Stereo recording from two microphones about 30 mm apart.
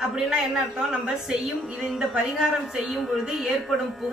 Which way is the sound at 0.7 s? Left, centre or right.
Right.